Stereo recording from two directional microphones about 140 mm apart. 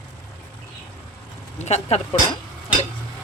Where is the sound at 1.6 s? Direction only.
50° left (ahead or behind).